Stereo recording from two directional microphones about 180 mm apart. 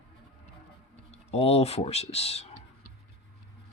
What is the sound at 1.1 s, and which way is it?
Speech, 35° left (ahead or behind).